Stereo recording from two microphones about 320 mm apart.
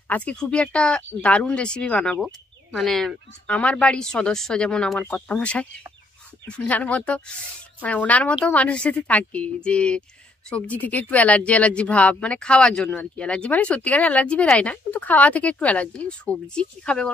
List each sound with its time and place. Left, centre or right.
0.1 s speech: centre